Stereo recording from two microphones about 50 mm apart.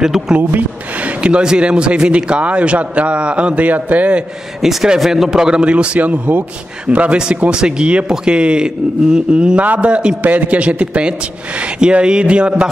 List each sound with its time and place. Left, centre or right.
0.4 s speech: right
1.2 s a man's voice: centre
4.8 s a man's voice: centre
9.6 s a man's voice: right
10.2 s a man's voice: right